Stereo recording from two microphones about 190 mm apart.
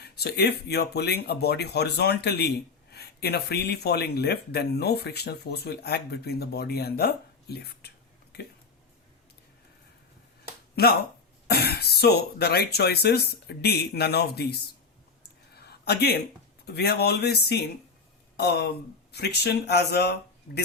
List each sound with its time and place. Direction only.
0.0 s speech: 60° left (ahead or behind)
10.8 s speech: 55° left (ahead or behind)
15.5 s a sound: 60° left (ahead or behind)
16.6 s speech: 60° left (ahead or behind)